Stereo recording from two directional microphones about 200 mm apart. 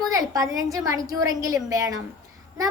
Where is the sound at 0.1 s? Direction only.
15° right (ahead or behind).